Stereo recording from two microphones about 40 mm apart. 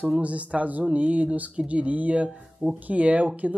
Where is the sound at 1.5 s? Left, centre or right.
Right.